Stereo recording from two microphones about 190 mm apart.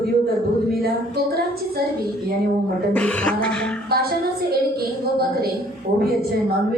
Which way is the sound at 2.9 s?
5° left (ahead or behind).